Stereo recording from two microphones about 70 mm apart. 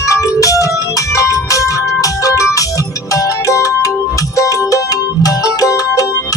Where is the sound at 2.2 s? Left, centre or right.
Left.